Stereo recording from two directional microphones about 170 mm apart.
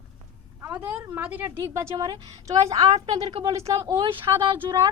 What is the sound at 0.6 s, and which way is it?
A woman's voice, 10° right (ahead or behind).